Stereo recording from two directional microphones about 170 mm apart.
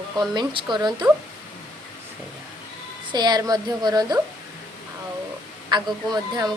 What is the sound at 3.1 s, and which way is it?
A woman's voice, 25° right (ahead or behind).